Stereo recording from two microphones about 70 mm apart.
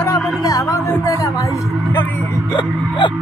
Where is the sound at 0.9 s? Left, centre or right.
Left.